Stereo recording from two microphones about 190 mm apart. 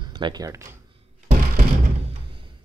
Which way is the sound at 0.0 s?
25° right (ahead or behind).